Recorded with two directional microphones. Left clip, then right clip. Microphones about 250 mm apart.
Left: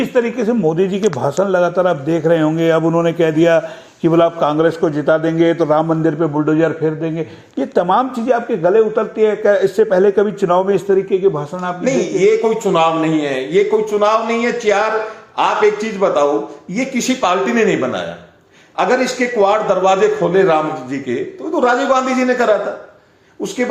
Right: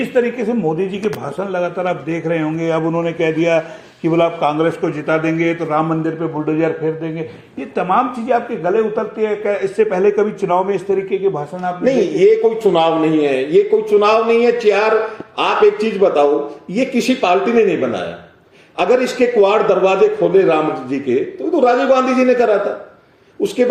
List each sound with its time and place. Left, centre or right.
0.0 s a man's voice: left
11.9 s a man's voice: centre
12.7 s a man's voice: left
13.5 s a man's voice: centre